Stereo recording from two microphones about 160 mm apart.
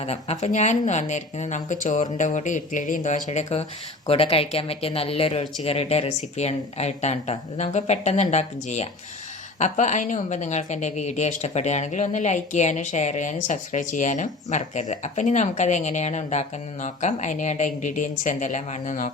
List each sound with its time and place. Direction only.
0.0 s a woman's voice: 40° left (ahead or behind)